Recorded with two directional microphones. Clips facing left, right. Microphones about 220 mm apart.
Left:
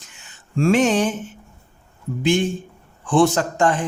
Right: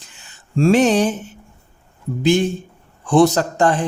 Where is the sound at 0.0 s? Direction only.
35° right (ahead or behind).